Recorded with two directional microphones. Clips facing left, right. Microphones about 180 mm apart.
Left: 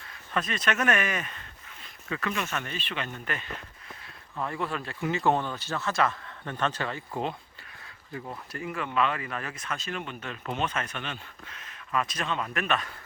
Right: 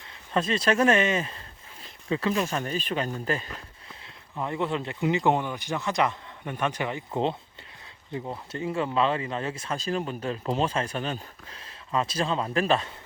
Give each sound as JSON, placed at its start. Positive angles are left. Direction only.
{"t": 0.3, "sound": "speech", "side_deg": -30}
{"t": 4.4, "sound": "speech", "side_deg": -20}